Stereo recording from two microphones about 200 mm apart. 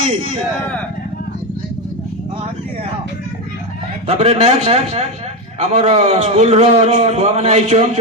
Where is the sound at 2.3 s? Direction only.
30° right (ahead or behind).